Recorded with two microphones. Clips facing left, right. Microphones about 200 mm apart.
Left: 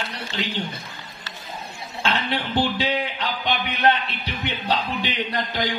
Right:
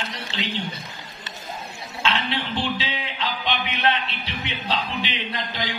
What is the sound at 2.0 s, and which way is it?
A man's voice, 45° left (ahead or behind).